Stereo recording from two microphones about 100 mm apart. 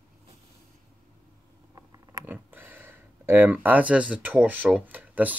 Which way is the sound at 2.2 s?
20° right (ahead or behind).